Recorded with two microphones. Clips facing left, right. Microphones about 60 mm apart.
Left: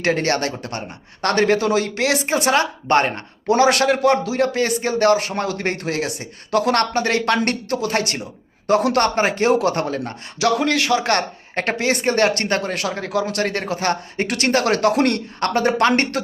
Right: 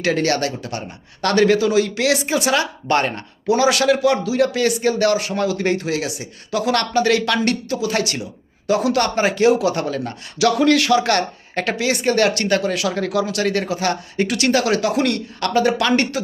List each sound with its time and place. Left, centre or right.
0.0 s a man's voice: left
7.7 s a man's voice: left
15.4 s a man's voice: left
16.1 s speech: left